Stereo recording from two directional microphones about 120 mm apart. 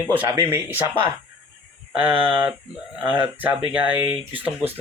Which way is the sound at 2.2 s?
15° right (ahead or behind).